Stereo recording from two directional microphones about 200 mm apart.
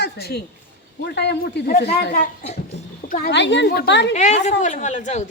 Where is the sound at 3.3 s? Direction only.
60° left (ahead or behind).